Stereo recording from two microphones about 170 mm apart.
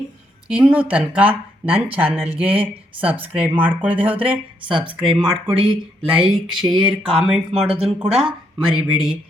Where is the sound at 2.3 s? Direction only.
35° right (ahead or behind).